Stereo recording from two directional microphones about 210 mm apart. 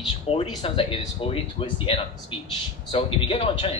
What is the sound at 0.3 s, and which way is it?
Speech, 30° left (ahead or behind).